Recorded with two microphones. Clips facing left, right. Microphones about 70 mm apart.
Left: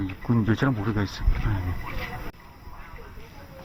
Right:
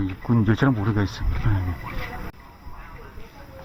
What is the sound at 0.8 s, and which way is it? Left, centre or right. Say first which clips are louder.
Speech: right 3 dB; right.